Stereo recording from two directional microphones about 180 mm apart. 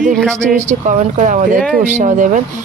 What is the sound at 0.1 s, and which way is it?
Speech, 5° left (ahead or behind).